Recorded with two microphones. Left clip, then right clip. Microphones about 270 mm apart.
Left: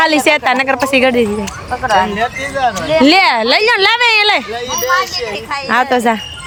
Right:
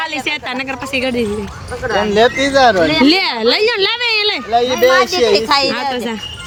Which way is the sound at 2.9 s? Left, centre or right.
Centre.